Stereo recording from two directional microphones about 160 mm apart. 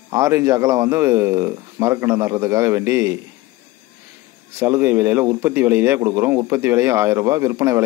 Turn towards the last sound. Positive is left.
turn(degrees=-20)  # may be behind; listen again after turning